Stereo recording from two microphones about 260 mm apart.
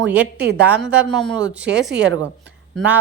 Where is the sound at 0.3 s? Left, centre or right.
Right.